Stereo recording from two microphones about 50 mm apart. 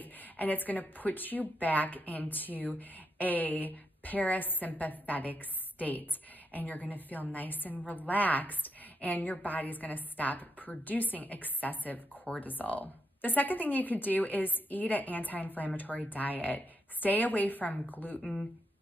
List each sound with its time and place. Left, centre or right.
0.0 s a woman's voice: left
18.2 s speech: centre